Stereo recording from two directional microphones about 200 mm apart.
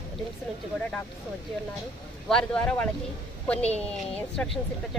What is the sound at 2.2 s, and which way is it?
Speech, 5° left (ahead or behind).